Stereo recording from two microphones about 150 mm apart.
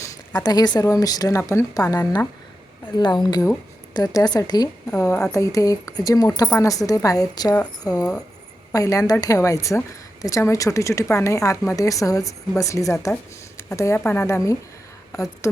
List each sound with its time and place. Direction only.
0.0 s a woman's voice: 25° left (ahead or behind)